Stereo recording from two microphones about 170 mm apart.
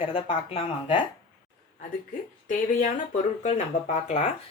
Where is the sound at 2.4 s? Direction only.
50° left (ahead or behind).